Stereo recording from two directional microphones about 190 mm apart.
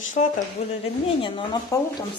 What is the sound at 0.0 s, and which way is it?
Speech, 40° left (ahead or behind).